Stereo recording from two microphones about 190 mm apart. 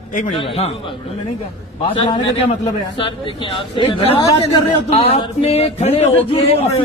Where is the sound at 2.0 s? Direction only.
25° left (ahead or behind).